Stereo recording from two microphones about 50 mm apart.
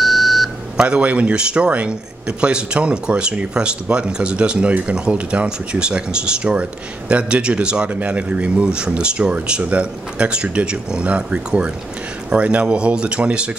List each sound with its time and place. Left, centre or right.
0.0 s beep: centre
0.7 s speech: right